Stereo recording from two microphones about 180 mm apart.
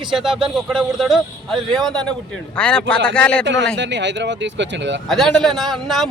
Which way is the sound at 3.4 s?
85° right.